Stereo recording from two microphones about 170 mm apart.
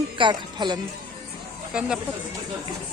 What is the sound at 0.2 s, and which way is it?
Speech, 25° right (ahead or behind).